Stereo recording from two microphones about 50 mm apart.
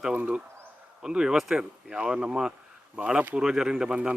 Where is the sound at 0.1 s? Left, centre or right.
Right.